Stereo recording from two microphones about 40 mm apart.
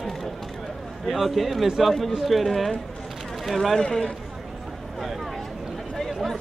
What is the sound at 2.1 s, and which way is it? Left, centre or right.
Speech, centre.